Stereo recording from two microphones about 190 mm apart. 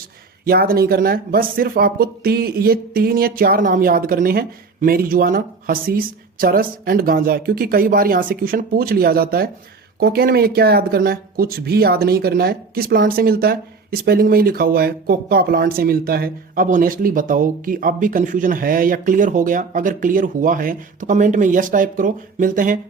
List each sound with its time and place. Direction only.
0.4 s speech: 50° right (ahead or behind)